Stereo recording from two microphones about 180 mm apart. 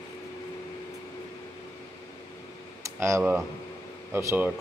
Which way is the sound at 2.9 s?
15° right (ahead or behind).